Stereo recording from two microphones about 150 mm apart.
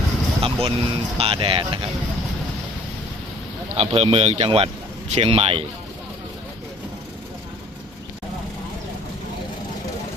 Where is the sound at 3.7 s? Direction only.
40° right (ahead or behind).